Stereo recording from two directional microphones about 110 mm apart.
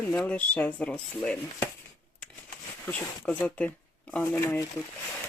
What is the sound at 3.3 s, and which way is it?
Speech, 10° left (ahead or behind).